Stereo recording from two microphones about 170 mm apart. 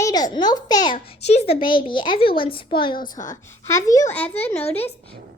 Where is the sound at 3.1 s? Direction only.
20° left (ahead or behind).